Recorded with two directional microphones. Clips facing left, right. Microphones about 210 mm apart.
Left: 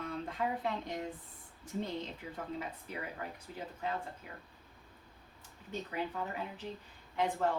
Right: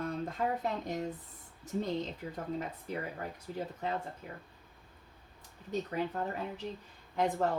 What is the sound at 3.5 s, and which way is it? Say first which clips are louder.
Speech: right 4 dB; 40° right (ahead or behind).